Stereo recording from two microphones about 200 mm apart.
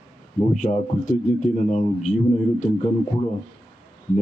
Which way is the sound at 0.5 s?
40° left (ahead or behind).